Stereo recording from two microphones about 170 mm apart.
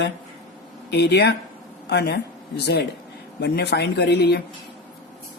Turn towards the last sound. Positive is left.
turn(degrees=75)  # may be behind; listen again after turning